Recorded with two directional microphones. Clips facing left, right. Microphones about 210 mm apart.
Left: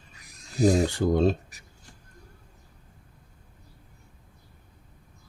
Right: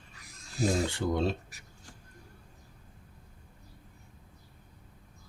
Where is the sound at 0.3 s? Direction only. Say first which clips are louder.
Left 7 dB; 15° left (ahead or behind).